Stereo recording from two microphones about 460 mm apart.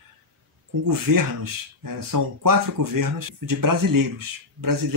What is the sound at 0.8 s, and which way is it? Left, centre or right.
Speech, right.